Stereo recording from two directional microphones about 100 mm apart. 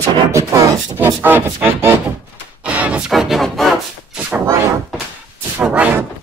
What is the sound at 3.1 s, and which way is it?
Music, centre (ahead or behind).